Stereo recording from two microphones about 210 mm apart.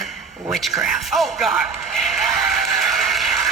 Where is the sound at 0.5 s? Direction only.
Centre (ahead or behind).